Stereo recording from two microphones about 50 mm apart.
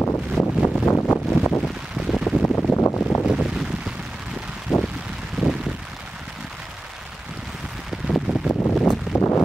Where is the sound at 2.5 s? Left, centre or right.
Centre.